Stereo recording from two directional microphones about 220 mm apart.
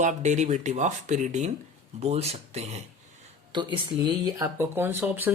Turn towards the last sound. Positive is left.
turn(degrees=-10)  # may be behind; listen again after turning